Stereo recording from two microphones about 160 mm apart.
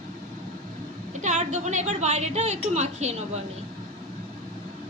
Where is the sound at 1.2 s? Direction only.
45° right (ahead or behind).